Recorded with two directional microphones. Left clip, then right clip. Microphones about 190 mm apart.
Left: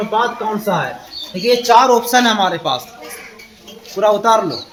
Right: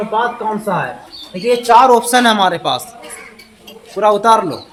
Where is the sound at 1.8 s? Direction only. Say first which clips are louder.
Right 2 dB; 40° right (ahead or behind).